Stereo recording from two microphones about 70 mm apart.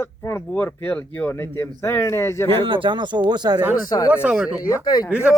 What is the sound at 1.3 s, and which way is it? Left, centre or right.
Speech, left.